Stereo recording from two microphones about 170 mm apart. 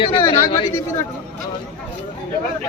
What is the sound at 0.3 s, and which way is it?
Speech, 30° left (ahead or behind).